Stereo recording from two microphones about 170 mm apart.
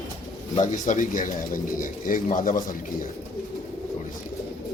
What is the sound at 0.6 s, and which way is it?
Speech, 50° left (ahead or behind).